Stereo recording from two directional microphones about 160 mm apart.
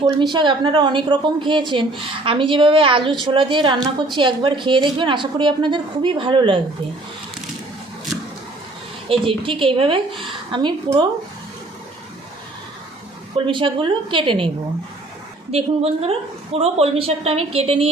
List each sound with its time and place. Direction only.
0.2 s a woman's voice: 30° right (ahead or behind)
9.0 s a woman's voice: 30° right (ahead or behind)
13.3 s a woman's voice: 30° right (ahead or behind)
15.5 s a woman's voice: 40° right (ahead or behind)